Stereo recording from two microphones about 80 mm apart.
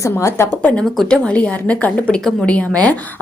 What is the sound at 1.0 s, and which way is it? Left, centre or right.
A woman's voice, centre.